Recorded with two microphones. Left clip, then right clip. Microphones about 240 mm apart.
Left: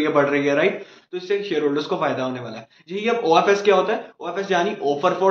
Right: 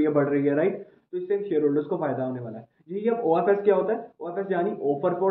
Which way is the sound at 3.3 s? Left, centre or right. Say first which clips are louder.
Left 6 dB; centre.